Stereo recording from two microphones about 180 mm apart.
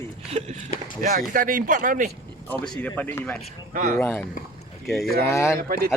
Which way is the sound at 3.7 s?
50° right (ahead or behind).